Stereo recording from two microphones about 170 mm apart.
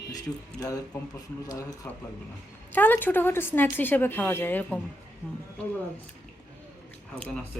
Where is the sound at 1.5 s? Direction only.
20° left (ahead or behind).